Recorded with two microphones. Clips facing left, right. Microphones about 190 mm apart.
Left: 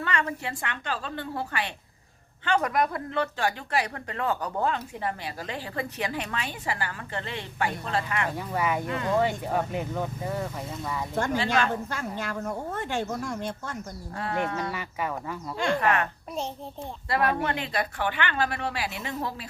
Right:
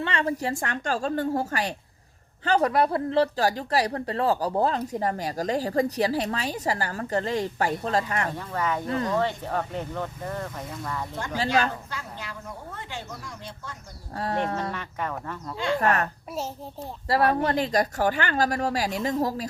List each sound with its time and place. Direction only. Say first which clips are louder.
0.0 s a woman's voice: right 3 dB; 30° right (ahead or behind)
8.4 s speech: left 1 dB; 10° left (ahead or behind)
11.9 s speech: left 5 dB; 50° left (ahead or behind)
14.2 s a woman's voice: right 2 dB; 35° right (ahead or behind)
14.7 s speech: even; 5° left (ahead or behind)
15.5 s speech: even; 50° left (ahead or behind)
15.8 s a woman's voice: right 3 dB; 40° right (ahead or behind)
17.1 s a woman's voice: right 4 dB; 35° right (ahead or behind)